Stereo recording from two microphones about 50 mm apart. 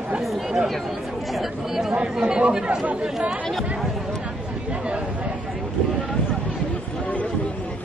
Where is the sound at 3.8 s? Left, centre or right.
Centre.